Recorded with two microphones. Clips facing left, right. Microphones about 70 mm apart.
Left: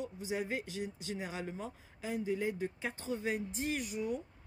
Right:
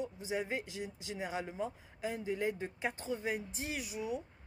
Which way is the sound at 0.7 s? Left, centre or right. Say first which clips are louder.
Left 2 dB; centre.